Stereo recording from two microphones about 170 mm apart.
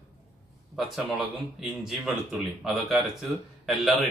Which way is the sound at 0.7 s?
Centre (ahead or behind).